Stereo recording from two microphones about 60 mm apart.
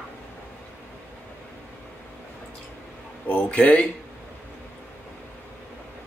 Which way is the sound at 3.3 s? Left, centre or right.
Left.